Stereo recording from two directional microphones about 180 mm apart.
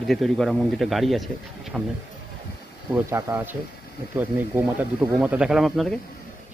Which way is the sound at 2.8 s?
15° right (ahead or behind).